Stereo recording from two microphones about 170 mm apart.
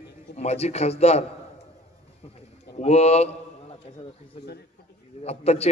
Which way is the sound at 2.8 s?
40° left (ahead or behind).